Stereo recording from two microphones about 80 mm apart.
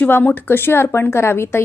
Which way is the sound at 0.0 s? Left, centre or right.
Left.